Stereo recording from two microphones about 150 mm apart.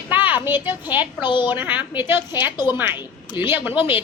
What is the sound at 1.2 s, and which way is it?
Speech, 30° left (ahead or behind).